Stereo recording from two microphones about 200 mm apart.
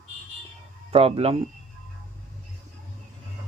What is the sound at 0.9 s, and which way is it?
Speech, 30° right (ahead or behind).